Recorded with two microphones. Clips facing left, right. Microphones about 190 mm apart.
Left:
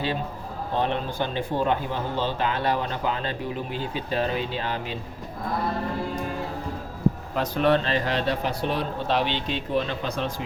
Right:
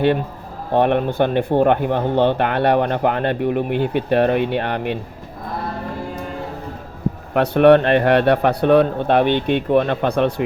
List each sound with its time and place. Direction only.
0.7 s speech: 60° right (ahead or behind)
7.3 s speech: 65° right (ahead or behind)